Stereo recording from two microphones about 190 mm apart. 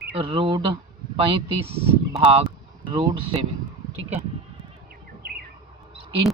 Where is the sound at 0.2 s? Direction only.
30° right (ahead or behind).